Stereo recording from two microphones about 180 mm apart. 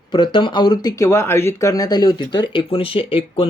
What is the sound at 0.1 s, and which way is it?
Speech, 25° left (ahead or behind).